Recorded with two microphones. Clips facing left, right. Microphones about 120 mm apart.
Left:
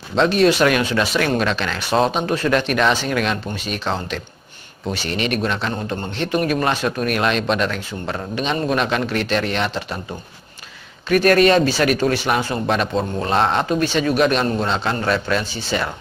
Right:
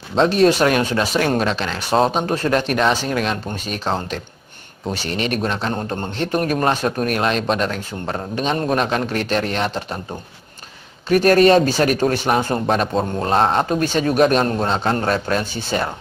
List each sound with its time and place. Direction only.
0.1 s speech: 35° right (ahead or behind)
11.1 s speech: 35° right (ahead or behind)